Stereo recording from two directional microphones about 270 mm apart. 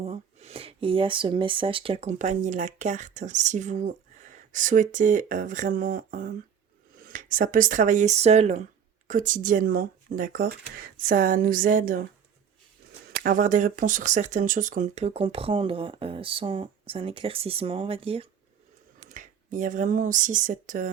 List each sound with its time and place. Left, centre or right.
0.0 s speech: right
13.1 s speech: right